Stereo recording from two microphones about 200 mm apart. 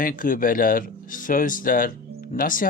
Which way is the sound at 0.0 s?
45° left (ahead or behind).